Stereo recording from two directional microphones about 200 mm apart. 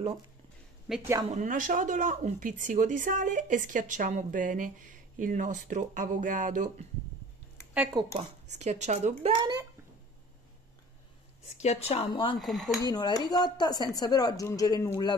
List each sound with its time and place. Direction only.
0.9 s speech: centre (ahead or behind)
1.3 s speech: 40° right (ahead or behind)
8.1 s speech: 35° right (ahead or behind)
9.2 s speech: 20° right (ahead or behind)
11.6 s speech: 30° left (ahead or behind)
12.4 s speech: centre (ahead or behind)
12.8 s speech: 20° left (ahead or behind)